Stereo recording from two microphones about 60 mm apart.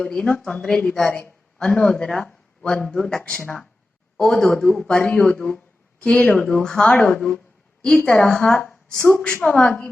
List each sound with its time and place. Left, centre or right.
0.0 s a man's voice: centre
6.3 s a man's voice: centre
6.9 s a woman's voice: left
8.6 s a sound: centre
9.0 s a woman's voice: left
9.4 s a woman's voice: left